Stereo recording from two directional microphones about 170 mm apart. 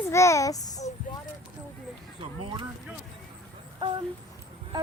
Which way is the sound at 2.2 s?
30° right (ahead or behind).